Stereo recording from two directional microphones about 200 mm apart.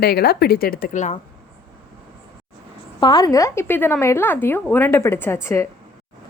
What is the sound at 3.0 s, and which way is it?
A woman's voice, 20° left (ahead or behind).